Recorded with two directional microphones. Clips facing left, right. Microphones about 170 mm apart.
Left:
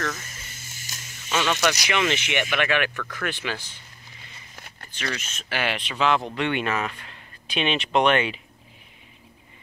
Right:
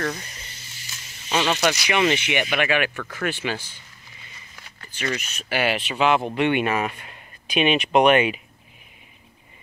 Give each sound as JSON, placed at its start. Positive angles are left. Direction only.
{"t": 0.0, "sound": "speech", "side_deg": -15}
{"t": 0.3, "sound": "buzz", "side_deg": 45}
{"t": 1.5, "sound": "speech", "side_deg": -30}
{"t": 1.9, "sound": "speech", "side_deg": -10}
{"t": 3.0, "sound": "speech", "side_deg": -25}
{"t": 5.1, "sound": "speech", "side_deg": -10}